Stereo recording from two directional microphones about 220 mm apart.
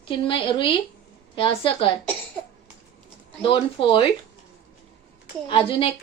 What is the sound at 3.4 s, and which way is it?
Speech, 20° left (ahead or behind).